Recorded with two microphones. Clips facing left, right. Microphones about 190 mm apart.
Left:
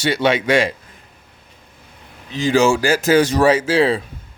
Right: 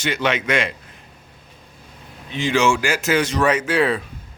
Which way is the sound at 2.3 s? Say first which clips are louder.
Left 4 dB; 35° left (ahead or behind).